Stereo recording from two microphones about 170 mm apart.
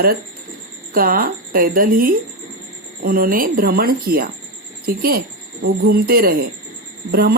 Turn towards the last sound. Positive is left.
turn(degrees=-60)  # may be behind; listen again after turning